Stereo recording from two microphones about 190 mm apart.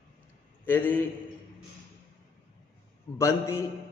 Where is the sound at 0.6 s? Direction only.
10° left (ahead or behind).